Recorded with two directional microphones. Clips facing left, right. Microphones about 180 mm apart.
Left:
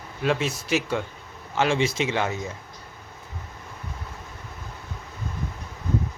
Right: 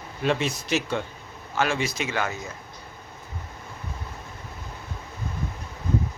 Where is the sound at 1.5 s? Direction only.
25° left (ahead or behind).